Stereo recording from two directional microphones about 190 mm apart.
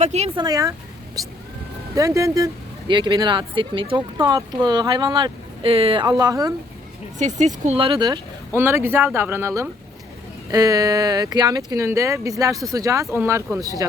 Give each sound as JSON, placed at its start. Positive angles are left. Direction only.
{"t": 0.0, "sound": "speech", "side_deg": -35}
{"t": 0.4, "sound": "speech", "side_deg": -20}
{"t": 2.0, "sound": "speech", "side_deg": -15}
{"t": 7.2, "sound": "speech", "side_deg": -40}